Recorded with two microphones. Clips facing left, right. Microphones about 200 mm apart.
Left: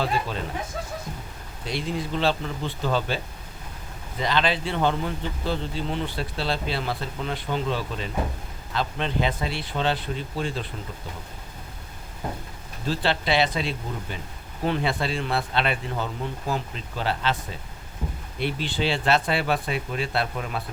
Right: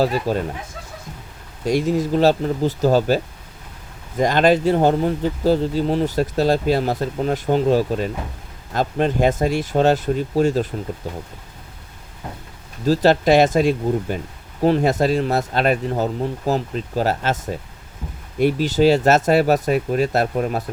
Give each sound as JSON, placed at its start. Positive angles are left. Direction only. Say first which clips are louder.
{"t": 0.0, "sound": "speech", "louder": "right 8 dB", "side_deg": -40}
{"t": 1.6, "sound": "speech", "louder": "right 10 dB", "side_deg": -45}
{"t": 4.2, "sound": "speech", "louder": "right 9 dB", "side_deg": -45}
{"t": 12.8, "sound": "speech", "louder": "right 10 dB", "side_deg": -40}